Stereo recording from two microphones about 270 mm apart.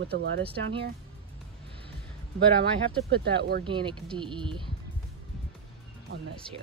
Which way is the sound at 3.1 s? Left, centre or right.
Right.